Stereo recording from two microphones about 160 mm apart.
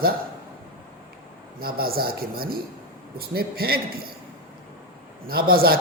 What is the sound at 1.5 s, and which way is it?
A man's voice, 70° right (ahead or behind).